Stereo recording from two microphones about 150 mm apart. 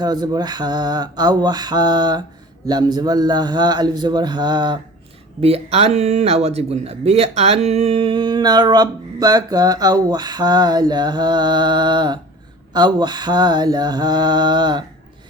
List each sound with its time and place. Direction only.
0.0 s speech: 25° right (ahead or behind)
5.4 s speech: 40° right (ahead or behind)